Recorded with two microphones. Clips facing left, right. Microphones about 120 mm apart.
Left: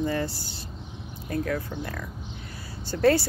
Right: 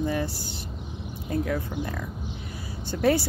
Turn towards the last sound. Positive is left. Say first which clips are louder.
# left 2 dB
turn(degrees=-15)  # may be behind; listen again after turning